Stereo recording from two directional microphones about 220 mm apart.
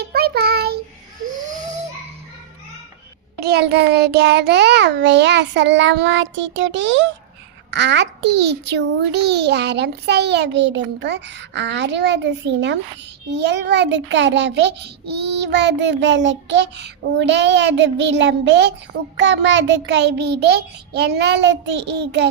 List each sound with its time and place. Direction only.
0.0 s child singing: 45° right (ahead or behind)
3.4 s a child's voice: 50° right (ahead or behind)